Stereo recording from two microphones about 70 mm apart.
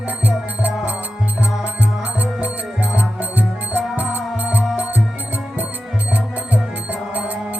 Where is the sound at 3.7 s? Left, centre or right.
Right.